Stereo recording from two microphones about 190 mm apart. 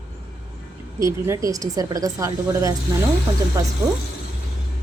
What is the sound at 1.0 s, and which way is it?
A woman's voice, 15° right (ahead or behind).